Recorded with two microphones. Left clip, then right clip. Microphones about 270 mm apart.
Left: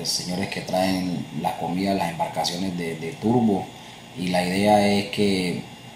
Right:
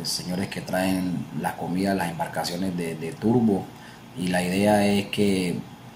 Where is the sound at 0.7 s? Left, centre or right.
Right.